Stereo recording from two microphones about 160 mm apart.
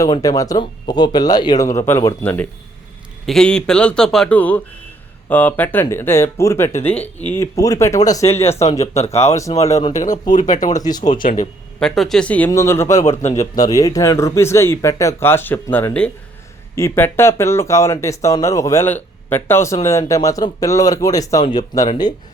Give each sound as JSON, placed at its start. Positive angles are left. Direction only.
{"t": 0.0, "sound": "speech", "side_deg": 20}
{"t": 9.9, "sound": "speech", "side_deg": 50}
{"t": 10.8, "sound": "speech", "side_deg": 25}
{"t": 11.1, "sound": "speech", "side_deg": 55}
{"t": 11.8, "sound": "speech", "side_deg": 5}
{"t": 13.2, "sound": "speech", "side_deg": 45}
{"t": 13.6, "sound": "speech", "side_deg": 20}